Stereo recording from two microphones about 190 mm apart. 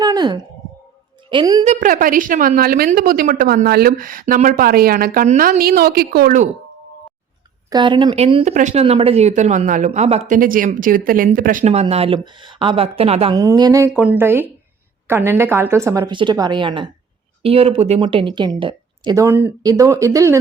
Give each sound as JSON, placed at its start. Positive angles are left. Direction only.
{"t": 0.0, "sound": "speech", "side_deg": -20}
{"t": 1.6, "sound": "a woman's voice", "side_deg": -40}
{"t": 7.7, "sound": "speech", "side_deg": -25}
{"t": 13.3, "sound": "a woman's voice", "side_deg": -20}
{"t": 19.1, "sound": "a woman's voice", "side_deg": -15}